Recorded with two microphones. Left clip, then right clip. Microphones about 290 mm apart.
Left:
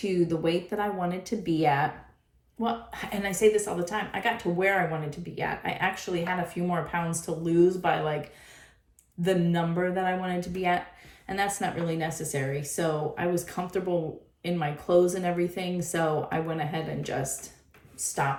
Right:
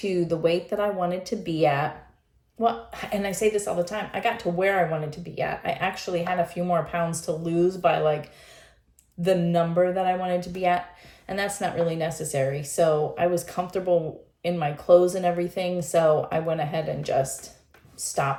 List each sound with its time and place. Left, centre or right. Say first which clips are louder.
0.0 s speech: right 3 dB; centre